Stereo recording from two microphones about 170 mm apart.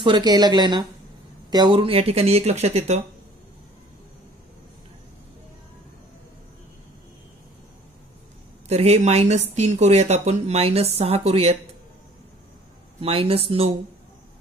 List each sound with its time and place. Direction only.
0.0 s a woman's voice: 25° right (ahead or behind)
8.6 s speech: 40° right (ahead or behind)
13.0 s speech: 35° right (ahead or behind)